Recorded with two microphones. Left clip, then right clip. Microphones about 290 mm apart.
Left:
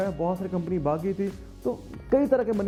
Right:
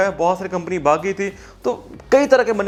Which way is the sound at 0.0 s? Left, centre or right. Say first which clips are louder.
Right 10 dB; centre.